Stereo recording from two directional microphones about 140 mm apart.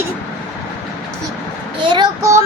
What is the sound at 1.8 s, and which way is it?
Child singing, 35° right (ahead or behind).